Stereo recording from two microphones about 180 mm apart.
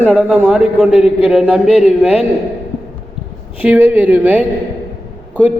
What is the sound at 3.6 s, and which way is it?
A man's voice, 10° right (ahead or behind).